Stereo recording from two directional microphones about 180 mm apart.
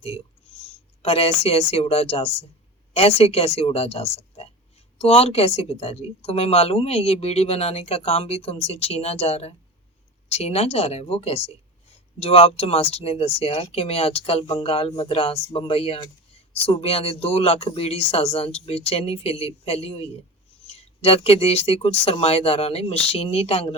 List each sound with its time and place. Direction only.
1.0 s speech: 35° left (ahead or behind)